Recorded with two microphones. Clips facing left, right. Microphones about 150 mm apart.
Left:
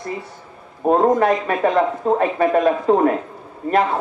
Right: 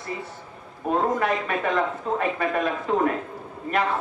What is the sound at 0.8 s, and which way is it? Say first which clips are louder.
A man's voice: left 8 dB; 40° left (ahead or behind).